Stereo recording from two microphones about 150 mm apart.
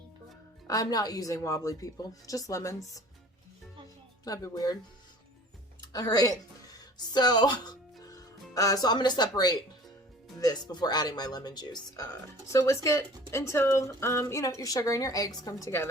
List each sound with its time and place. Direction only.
0.7 s speech: 25° left (ahead or behind)
4.2 s speech: 25° left (ahead or behind)
5.8 s speech: 25° left (ahead or behind)